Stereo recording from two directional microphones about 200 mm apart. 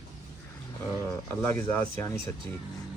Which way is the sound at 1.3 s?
10° left (ahead or behind).